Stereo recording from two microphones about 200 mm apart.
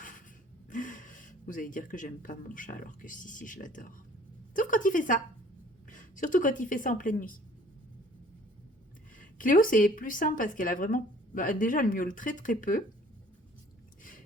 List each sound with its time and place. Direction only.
0.7 s speech: 40° left (ahead or behind)
9.1 s a woman's voice: 45° left (ahead or behind)